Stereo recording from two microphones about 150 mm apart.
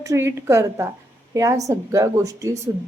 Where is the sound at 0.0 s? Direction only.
20° right (ahead or behind).